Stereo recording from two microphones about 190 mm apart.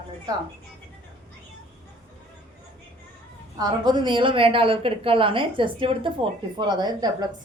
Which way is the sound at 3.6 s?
25° right (ahead or behind).